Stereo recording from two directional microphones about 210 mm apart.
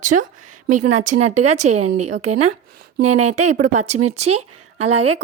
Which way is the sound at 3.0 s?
30° right (ahead or behind).